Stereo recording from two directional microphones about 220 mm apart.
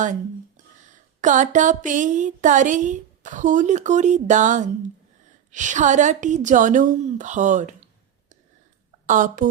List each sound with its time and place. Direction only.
0.0 s a woman's voice: 35° right (ahead or behind)
9.0 s a woman's voice: 35° right (ahead or behind)